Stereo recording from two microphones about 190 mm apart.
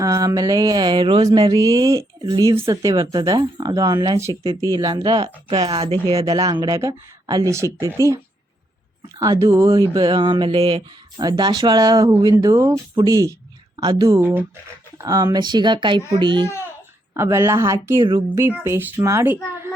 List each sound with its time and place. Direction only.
0.0 s mantra: 15° right (ahead or behind)
9.1 s a woman's voice: 20° right (ahead or behind)
9.9 s mantra: 25° right (ahead or behind)
13.7 s a woman's voice: 20° right (ahead or behind)
14.2 s a woman's voice: 10° right (ahead or behind)
14.9 s mantra: 20° right (ahead or behind)
17.2 s a woman's voice: 15° right (ahead or behind)
18.3 s a woman's voice: 10° right (ahead or behind)